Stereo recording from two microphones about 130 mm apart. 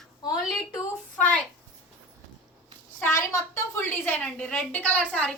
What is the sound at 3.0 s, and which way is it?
A woman's voice, 20° left (ahead or behind).